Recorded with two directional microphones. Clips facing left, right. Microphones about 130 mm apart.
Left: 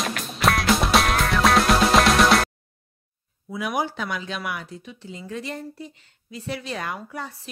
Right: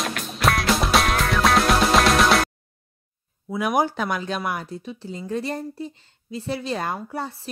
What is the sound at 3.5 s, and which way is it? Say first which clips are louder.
Speech: right 5 dB; 50° right (ahead or behind).